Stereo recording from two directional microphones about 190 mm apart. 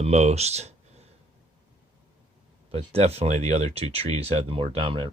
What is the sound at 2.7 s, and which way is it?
Speech, 30° right (ahead or behind).